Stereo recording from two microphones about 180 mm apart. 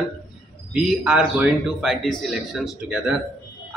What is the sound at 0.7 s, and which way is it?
A man's voice, 5° right (ahead or behind).